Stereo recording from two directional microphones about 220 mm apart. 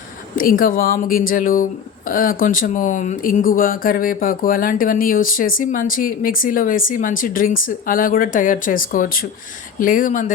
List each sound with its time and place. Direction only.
0.3 s speech: 40° left (ahead or behind)